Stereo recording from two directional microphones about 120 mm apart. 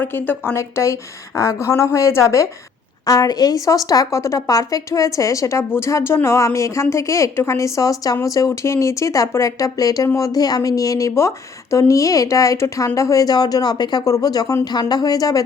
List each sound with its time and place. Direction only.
0.0 s a woman's voice: 15° left (ahead or behind)